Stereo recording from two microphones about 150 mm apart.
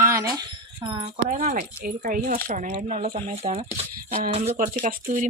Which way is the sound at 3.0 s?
70° right (ahead or behind).